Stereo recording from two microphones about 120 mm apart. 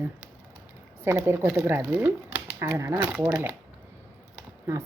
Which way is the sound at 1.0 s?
20° right (ahead or behind).